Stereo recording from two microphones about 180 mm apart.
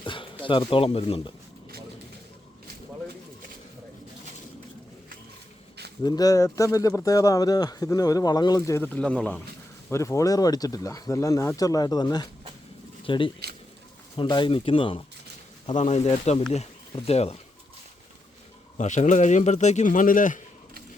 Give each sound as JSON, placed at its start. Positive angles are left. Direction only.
{"t": 0.0, "sound": "a sound", "side_deg": 25}
{"t": 0.7, "sound": "speech", "side_deg": 30}
{"t": 6.0, "sound": "speech", "side_deg": 20}
{"t": 18.8, "sound": "speech", "side_deg": 40}